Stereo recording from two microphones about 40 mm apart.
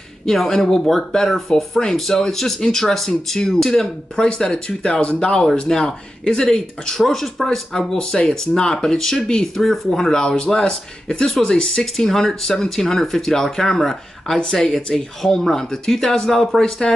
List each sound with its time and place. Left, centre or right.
0.3 s speech: centre
4.2 s speech: left
10.2 s speech: left
11.2 s speech: centre